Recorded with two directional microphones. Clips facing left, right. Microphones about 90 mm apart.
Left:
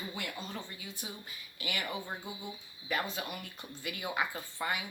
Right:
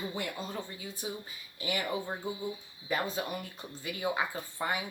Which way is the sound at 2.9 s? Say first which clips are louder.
Right 3 dB; 30° right (ahead or behind).